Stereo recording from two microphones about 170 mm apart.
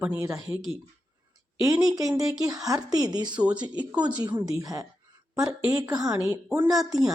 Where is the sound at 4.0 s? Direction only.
25° right (ahead or behind).